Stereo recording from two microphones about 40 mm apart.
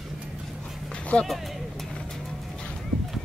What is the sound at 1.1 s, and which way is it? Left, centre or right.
Speech, left.